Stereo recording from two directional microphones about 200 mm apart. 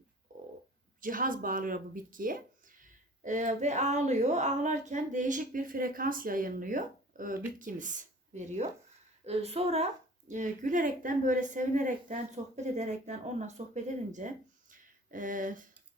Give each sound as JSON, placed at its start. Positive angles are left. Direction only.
{"t": 1.0, "sound": "speech", "side_deg": -45}